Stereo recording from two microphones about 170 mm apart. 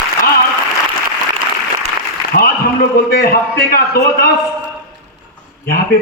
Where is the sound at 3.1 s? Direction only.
60° left (ahead or behind).